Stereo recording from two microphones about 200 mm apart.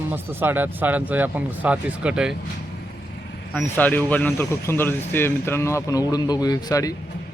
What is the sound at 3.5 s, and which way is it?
Speech, 5° left (ahead or behind).